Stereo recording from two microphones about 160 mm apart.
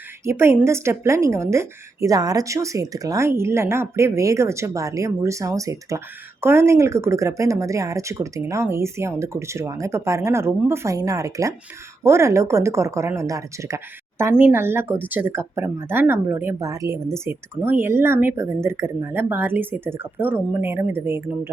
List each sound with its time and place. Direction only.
0.3 s a woman's voice: 15° right (ahead or behind)